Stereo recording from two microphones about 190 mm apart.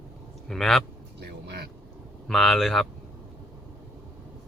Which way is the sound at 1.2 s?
60° right (ahead or behind).